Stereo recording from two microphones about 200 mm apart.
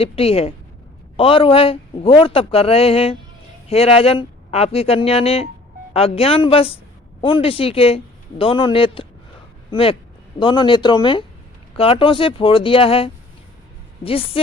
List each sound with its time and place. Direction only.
0.0 s a man's voice: 30° left (ahead or behind)